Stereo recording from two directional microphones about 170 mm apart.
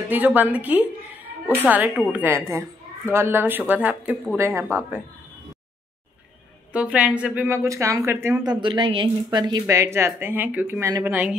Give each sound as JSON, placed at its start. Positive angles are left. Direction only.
{"t": 0.1, "sound": "a woman's voice", "side_deg": -10}
{"t": 6.7, "sound": "a woman's voice", "side_deg": -5}
{"t": 8.5, "sound": "a woman's voice", "side_deg": -30}